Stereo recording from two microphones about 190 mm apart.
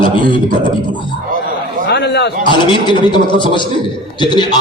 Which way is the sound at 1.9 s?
60° left (ahead or behind).